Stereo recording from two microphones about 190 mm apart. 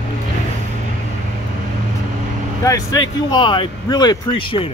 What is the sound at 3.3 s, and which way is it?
Speech, 25° left (ahead or behind).